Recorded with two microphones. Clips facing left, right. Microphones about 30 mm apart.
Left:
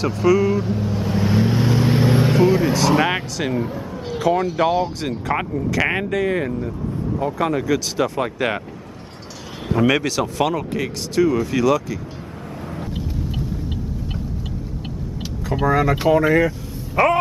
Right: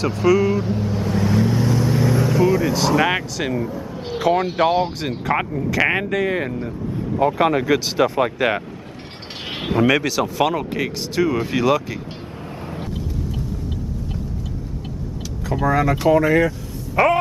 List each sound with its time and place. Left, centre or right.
0.0 s vehicle: centre; by 2.7 s left
3.0 s speech: centre
4.1 s speech: centre
5.3 s speech: centre
7.2 s speech: right
8.0 s speech: centre
9.8 s speech: centre; by 12.0 s right
12.6 s vehicle: centre
12.9 s vehicle: left
15.6 s speech: centre